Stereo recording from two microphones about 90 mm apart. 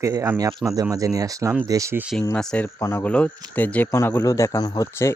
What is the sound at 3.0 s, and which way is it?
Speech, 15° left (ahead or behind).